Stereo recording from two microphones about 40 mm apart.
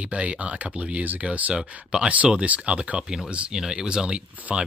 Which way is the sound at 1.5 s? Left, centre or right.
Centre.